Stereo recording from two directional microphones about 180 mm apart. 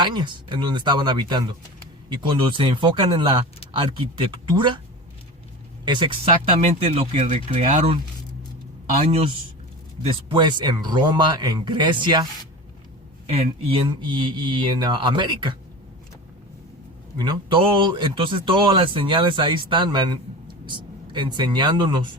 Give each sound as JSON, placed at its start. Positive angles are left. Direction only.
{"t": 0.0, "sound": "a man's voice", "side_deg": -25}
{"t": 5.8, "sound": "a man's voice", "side_deg": -25}
{"t": 6.5, "sound": "speech", "side_deg": -40}
{"t": 9.0, "sound": "a man's voice", "side_deg": -30}
{"t": 17.2, "sound": "a man's voice", "side_deg": -25}